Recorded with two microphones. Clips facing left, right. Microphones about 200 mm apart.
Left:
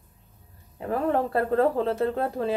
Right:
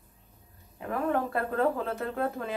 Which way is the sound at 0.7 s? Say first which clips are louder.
Left 4 dB; 30° left (ahead or behind).